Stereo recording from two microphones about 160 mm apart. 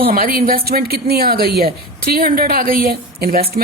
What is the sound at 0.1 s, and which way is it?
Speech, 65° right (ahead or behind).